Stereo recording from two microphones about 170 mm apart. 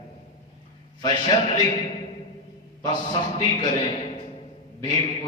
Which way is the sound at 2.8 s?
25° left (ahead or behind).